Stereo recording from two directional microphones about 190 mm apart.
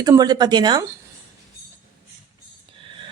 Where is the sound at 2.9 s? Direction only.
25° right (ahead or behind).